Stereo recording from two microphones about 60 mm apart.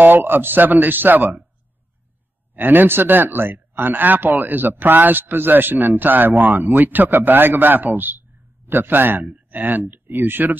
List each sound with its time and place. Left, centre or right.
0.0 s speech: right
2.5 s speech: right